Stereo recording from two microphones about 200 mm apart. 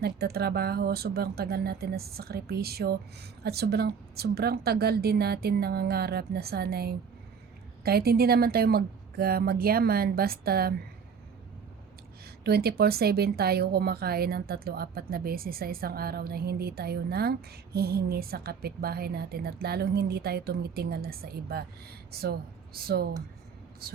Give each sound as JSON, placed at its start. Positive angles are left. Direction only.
{"t": 0.0, "sound": "speech", "side_deg": -50}
{"t": 12.2, "sound": "a woman's voice", "side_deg": -50}